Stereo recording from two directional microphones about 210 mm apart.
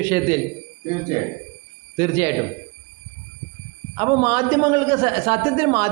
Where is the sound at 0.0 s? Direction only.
15° right (ahead or behind).